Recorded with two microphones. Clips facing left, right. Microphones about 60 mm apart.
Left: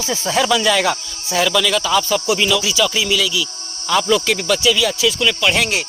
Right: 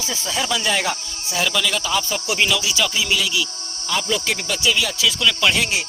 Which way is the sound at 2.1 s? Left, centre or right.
Left.